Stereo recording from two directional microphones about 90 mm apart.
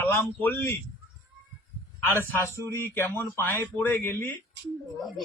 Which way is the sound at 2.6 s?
25° left (ahead or behind).